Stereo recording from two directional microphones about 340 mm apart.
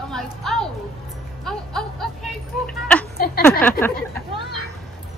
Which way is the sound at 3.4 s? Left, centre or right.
Centre.